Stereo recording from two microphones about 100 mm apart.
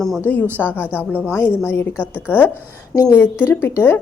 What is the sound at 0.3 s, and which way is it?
A woman's voice, 15° left (ahead or behind).